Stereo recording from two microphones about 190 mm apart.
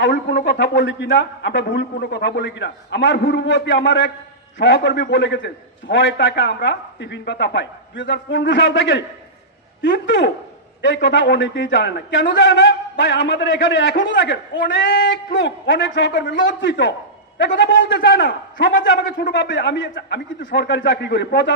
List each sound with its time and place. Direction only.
0.0 s a man's voice: 65° left (ahead or behind)